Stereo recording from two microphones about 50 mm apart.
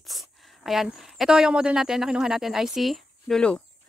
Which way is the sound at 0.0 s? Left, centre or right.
Centre.